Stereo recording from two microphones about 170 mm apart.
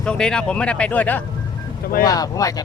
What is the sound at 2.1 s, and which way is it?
Speech, 20° left (ahead or behind).